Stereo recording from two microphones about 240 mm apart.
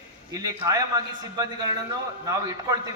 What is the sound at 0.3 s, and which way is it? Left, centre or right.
A man's voice, centre.